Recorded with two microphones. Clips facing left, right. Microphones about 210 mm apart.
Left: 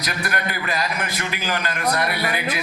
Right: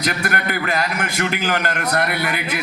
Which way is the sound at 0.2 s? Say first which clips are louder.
Right 3 dB; 50° right (ahead or behind).